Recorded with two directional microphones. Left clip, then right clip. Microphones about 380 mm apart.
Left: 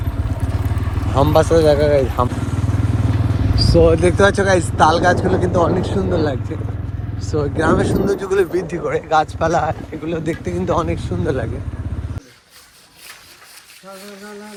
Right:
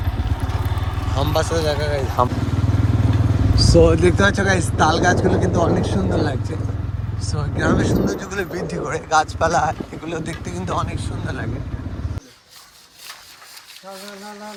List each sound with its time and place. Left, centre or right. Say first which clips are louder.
1.1 s vehicle: left 8 dB; centre
3.6 s a man's voice: left 1 dB; centre